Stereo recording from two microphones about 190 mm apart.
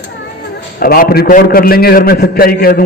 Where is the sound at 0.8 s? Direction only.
50° left (ahead or behind).